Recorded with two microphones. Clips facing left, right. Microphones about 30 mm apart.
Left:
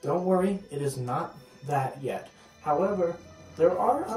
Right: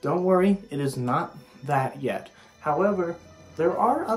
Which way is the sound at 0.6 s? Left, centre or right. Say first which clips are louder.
Right 4 dB; right.